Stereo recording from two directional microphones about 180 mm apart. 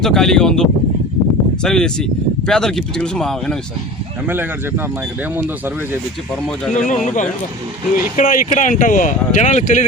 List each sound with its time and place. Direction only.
0.0 s speech: centre (ahead or behind)
5.4 s speech: 10° right (ahead or behind)
6.7 s speech: 45° left (ahead or behind)